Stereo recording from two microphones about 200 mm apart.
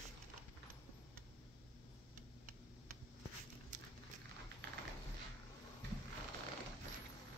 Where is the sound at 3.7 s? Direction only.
40° right (ahead or behind).